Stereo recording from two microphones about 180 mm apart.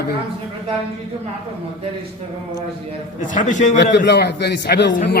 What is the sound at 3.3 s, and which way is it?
Speech, 45° left (ahead or behind).